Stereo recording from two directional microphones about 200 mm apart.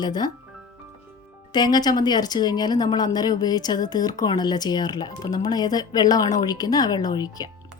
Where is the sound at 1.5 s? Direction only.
20° left (ahead or behind).